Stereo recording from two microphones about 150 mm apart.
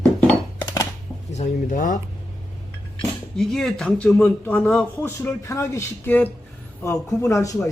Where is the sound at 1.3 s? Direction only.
55° left (ahead or behind).